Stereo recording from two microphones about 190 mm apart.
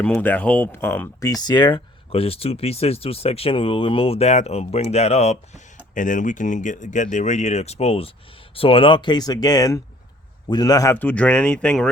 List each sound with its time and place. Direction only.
0.0 s speech: 10° left (ahead or behind)